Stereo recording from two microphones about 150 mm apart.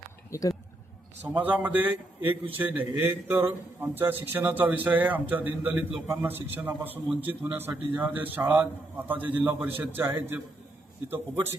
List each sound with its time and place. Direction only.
0.3 s speech: 20° left (ahead or behind)
1.3 s a man's voice: 10° right (ahead or behind)